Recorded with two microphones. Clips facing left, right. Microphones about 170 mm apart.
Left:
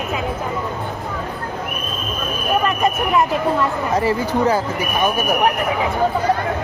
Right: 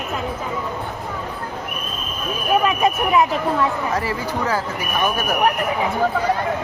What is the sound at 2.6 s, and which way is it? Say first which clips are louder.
Speech: even; centre (ahead or behind).